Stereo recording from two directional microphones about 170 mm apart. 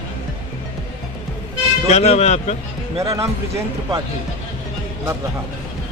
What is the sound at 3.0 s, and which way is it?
Speech, 20° right (ahead or behind).